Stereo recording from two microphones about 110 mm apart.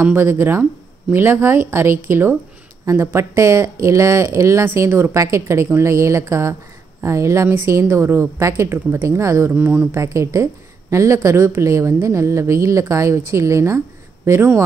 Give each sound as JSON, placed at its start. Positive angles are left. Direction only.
{"t": 0.0, "sound": "a woman's voice", "side_deg": -20}
{"t": 9.9, "sound": "a woman's voice", "side_deg": -30}